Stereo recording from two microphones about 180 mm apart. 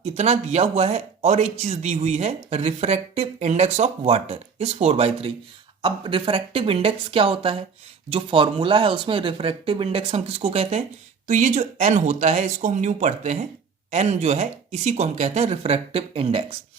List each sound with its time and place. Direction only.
0.0 s speech: 35° right (ahead or behind)